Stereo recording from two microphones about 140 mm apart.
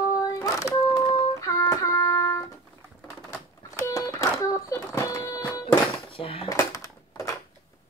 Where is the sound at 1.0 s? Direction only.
20° left (ahead or behind).